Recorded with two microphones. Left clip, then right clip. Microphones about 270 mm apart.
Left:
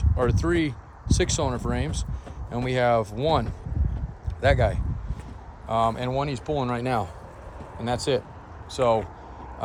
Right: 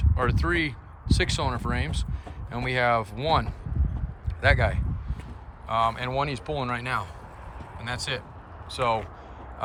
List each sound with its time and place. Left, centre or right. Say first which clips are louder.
0.0 s speech: left 2 dB; centre